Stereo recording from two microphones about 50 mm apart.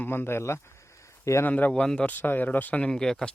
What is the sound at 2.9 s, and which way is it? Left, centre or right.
Speech, centre.